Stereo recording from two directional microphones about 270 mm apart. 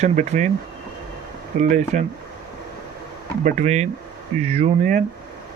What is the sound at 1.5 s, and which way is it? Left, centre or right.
Speech, right.